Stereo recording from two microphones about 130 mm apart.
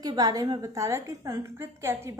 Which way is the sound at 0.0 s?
30° right (ahead or behind).